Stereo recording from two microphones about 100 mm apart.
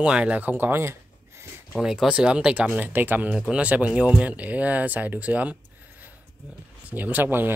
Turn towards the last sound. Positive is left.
turn(degrees=-20)  # may be behind; listen again after turning